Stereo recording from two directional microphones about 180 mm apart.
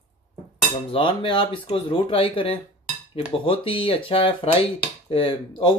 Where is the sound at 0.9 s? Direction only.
30° left (ahead or behind).